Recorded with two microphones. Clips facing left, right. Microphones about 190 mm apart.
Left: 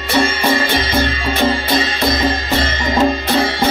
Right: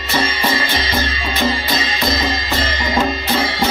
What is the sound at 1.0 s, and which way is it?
Music, 55° left (ahead or behind).